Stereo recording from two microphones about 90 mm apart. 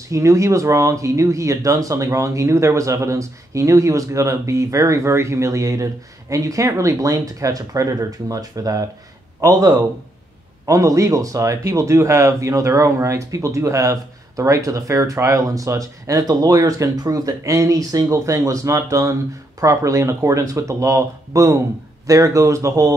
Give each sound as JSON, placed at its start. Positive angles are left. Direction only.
{"t": 0.1, "sound": "a man's voice", "side_deg": -35}